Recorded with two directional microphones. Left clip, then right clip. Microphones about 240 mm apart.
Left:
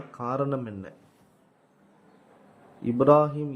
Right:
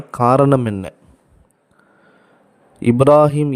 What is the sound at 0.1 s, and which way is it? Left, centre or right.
Speech, right.